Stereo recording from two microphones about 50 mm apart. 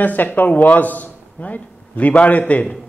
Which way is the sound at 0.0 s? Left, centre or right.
Left.